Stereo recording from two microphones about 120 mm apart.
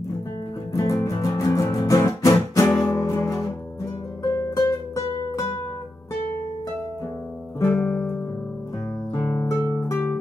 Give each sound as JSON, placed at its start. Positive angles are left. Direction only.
{"t": 0.7, "sound": "music", "side_deg": 25}
{"t": 7.6, "sound": "music", "side_deg": 15}
{"t": 9.1, "sound": "music", "side_deg": 20}